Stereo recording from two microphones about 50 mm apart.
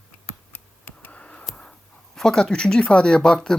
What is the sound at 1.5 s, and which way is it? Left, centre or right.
Speech, centre.